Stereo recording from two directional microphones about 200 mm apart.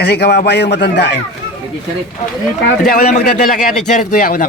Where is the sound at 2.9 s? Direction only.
45° left (ahead or behind).